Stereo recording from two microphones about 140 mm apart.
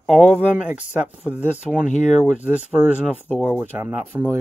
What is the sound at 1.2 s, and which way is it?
Speech, 10° right (ahead or behind).